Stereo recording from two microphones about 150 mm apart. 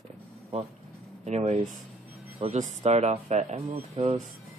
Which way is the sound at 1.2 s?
45° right (ahead or behind).